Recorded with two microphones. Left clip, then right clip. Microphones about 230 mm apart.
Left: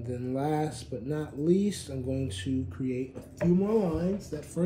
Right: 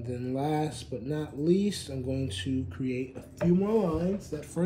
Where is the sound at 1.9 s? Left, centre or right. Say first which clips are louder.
Even; right.